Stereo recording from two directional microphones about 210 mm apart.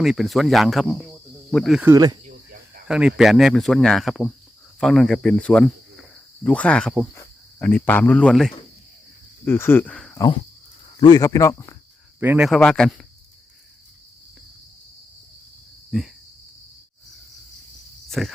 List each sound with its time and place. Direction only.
0.0 s speech: centre (ahead or behind)
1.9 s speech: 20° right (ahead or behind)
2.2 s cricket: 40° right (ahead or behind)
2.8 s speech: 5° right (ahead or behind)
7.2 s cricket: 10° left (ahead or behind)
9.4 s speech: 10° left (ahead or behind)
10.2 s speech: 20° left (ahead or behind)
12.2 s speech: 5° right (ahead or behind)
12.5 s speech: 5° left (ahead or behind)
15.9 s cricket: centre (ahead or behind)
18.1 s cricket: centre (ahead or behind)